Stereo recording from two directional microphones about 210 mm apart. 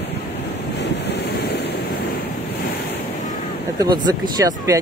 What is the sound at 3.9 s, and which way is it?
Speech, 20° right (ahead or behind).